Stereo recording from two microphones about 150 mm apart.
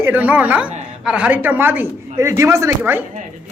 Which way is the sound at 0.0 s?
10° right (ahead or behind).